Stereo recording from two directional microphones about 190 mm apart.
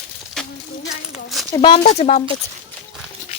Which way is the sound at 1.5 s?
25° left (ahead or behind).